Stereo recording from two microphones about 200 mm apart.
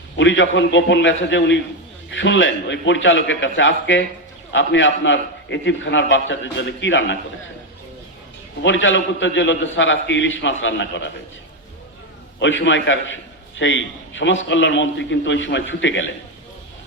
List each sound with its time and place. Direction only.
0.2 s a man's voice: 70° left (ahead or behind)
8.6 s a man's voice: 70° left (ahead or behind)
12.4 s a man's voice: 70° left (ahead or behind)